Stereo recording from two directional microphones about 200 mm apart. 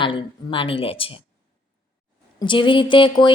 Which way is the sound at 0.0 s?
25° left (ahead or behind).